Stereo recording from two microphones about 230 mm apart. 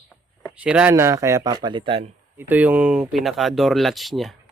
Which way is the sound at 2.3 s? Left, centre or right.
Centre.